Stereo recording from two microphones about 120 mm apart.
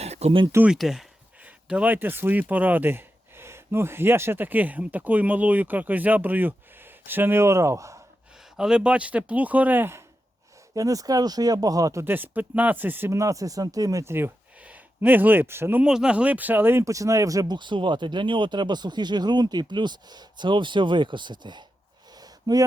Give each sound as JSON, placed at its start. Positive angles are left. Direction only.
{"t": 0.0, "sound": "a sound", "side_deg": -60}
{"t": 0.7, "sound": "speech", "side_deg": -5}
{"t": 8.5, "sound": "speech", "side_deg": -5}
{"t": 10.8, "sound": "speech", "side_deg": -30}
{"t": 15.8, "sound": "speech", "side_deg": -5}
{"t": 22.2, "sound": "a sound", "side_deg": -35}